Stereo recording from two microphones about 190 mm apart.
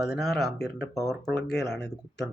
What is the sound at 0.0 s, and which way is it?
Speech, centre (ahead or behind).